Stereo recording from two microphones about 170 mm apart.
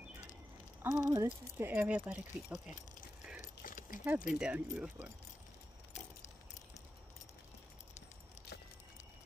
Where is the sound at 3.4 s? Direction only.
50° left (ahead or behind).